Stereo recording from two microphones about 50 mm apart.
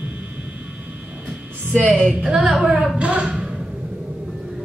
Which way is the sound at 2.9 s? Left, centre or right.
Right.